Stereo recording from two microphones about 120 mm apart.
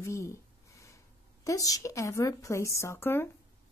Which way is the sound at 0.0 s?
25° left (ahead or behind).